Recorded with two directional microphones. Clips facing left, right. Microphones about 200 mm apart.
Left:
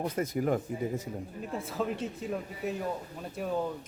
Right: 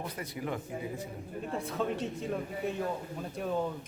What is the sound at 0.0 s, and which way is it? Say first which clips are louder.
Speech: left 8 dB; 45° left (ahead or behind).